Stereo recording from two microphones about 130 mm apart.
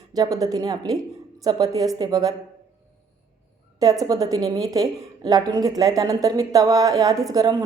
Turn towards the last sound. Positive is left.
turn(degrees=-25)  # may be behind; listen again after turning